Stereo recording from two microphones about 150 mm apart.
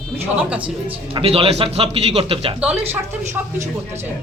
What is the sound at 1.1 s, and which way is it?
Speech, 40° right (ahead or behind).